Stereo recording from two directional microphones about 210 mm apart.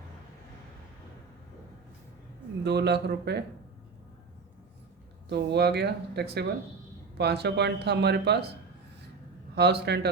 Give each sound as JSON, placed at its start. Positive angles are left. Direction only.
{"t": 2.6, "sound": "speech", "side_deg": -50}
{"t": 5.3, "sound": "speech", "side_deg": -55}
{"t": 9.6, "sound": "speech", "side_deg": -55}